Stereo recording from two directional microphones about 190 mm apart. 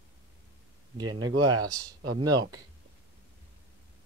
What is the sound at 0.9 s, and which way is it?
Speech, 25° right (ahead or behind).